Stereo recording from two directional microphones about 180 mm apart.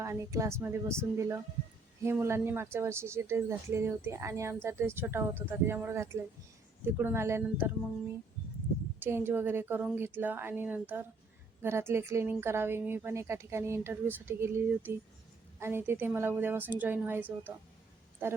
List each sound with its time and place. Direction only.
0.0 s a woman's voice: 15° right (ahead or behind)
9.0 s a woman's voice: 10° right (ahead or behind)